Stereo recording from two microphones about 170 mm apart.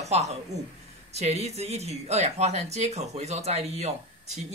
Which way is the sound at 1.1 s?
40° right (ahead or behind).